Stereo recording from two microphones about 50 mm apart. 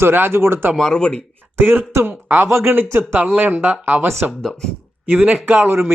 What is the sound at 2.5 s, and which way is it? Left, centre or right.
Speech, right.